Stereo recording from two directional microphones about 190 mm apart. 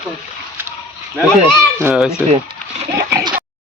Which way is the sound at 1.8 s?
5° right (ahead or behind).